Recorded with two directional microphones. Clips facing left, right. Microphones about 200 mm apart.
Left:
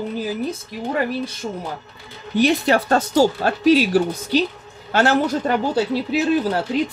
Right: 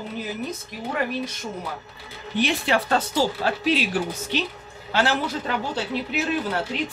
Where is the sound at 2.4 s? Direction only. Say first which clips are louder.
Left 6 dB; 40° left (ahead or behind).